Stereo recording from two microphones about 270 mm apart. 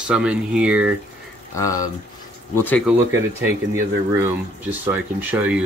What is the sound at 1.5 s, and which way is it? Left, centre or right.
Speech, centre.